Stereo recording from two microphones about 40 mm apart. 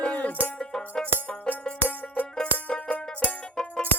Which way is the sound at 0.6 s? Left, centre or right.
Centre.